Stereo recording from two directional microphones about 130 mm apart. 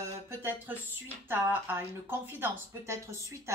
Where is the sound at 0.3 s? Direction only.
15° right (ahead or behind).